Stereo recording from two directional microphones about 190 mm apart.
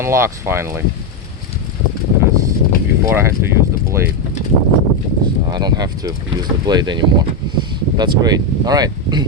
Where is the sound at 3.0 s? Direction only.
15° right (ahead or behind).